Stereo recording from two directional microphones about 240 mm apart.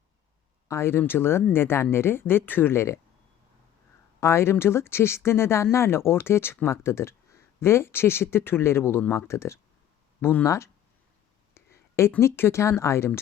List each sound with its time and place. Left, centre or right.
0.7 s speech: centre
4.2 s speech: centre